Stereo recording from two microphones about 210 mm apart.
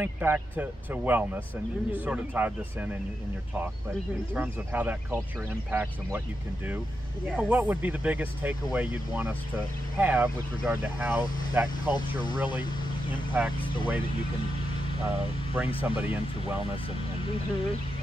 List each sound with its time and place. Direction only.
0.0 s speech: 10° right (ahead or behind)
4.4 s speech: 10° right (ahead or behind)
7.2 s speech: 5° right (ahead or behind)
11.9 s speech: 20° left (ahead or behind)
13.4 s speech: 10° right (ahead or behind)
15.5 s speech: 10° right (ahead or behind)